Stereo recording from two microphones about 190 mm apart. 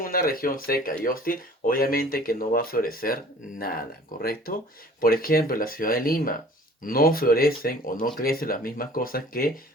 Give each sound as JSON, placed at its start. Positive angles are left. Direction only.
{"t": 0.0, "sound": "speech", "side_deg": 50}